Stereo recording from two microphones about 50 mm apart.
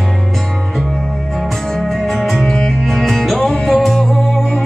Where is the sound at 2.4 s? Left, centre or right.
Centre.